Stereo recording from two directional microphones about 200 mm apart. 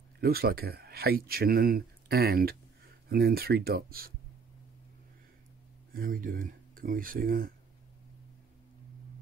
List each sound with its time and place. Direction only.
0.2 s speech: 50° right (ahead or behind)
5.9 s speech: 45° right (ahead or behind)